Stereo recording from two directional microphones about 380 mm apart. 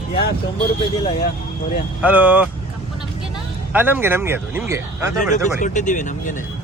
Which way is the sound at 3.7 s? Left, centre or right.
Centre.